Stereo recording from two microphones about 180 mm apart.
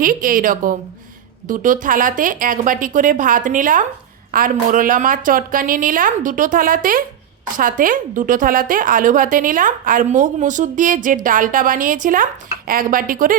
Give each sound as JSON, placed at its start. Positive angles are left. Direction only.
{"t": 0.0, "sound": "a woman's voice", "side_deg": -50}